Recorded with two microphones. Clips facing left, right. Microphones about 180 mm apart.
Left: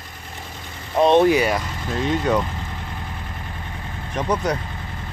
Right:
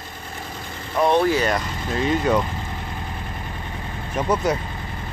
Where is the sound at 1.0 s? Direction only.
20° left (ahead or behind); by 2.4 s centre (ahead or behind).